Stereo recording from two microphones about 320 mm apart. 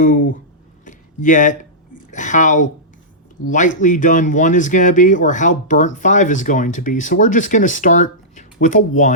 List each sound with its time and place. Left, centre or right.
0.0 s speech: left
0.9 s a sound: left
2.1 s speech: left
3.8 s speech: left